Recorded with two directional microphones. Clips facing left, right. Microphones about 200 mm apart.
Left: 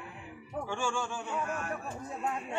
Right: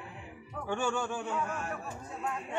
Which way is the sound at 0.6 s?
55° right (ahead or behind).